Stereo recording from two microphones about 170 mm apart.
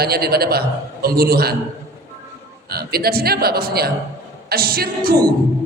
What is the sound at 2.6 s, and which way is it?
A woman's voice, 65° right (ahead or behind).